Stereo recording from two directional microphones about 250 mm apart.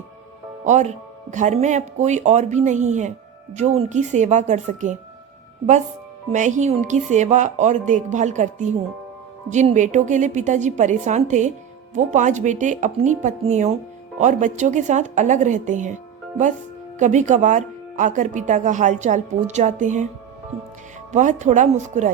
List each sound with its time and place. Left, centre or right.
0.6 s speech: right
6.3 s speech: right
17.0 s speech: right
21.1 s speech: right